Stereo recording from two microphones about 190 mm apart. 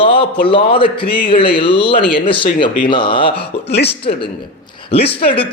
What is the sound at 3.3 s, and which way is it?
Speech, 60° left (ahead or behind).